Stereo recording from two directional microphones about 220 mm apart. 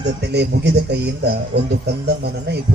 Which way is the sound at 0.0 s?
50° right (ahead or behind).